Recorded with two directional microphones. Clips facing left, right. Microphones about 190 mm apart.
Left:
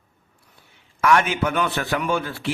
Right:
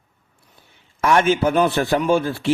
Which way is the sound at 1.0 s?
30° right (ahead or behind).